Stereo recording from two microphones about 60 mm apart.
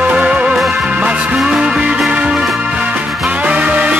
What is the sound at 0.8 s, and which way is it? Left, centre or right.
Music, centre.